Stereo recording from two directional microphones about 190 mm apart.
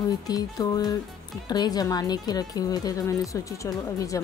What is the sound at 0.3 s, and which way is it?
A woman's voice, 20° left (ahead or behind).